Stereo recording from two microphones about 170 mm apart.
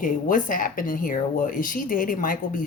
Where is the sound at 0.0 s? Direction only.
50° left (ahead or behind).